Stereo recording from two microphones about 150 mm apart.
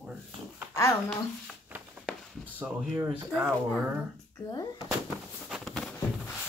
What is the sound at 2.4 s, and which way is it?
Speech, 10° right (ahead or behind).